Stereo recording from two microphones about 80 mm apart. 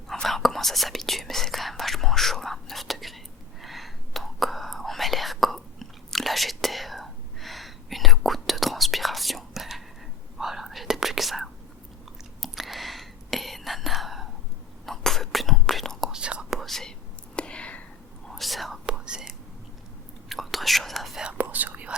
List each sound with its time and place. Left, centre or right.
0.1 s whispering: centre
16.6 s whispering: centre
17.3 s a sound: centre
18.3 s whispering: centre
18.9 s whispering: centre
20.3 s whispering: centre
21.2 s whispering: right